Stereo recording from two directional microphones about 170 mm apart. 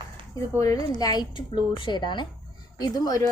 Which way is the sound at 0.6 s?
20° left (ahead or behind).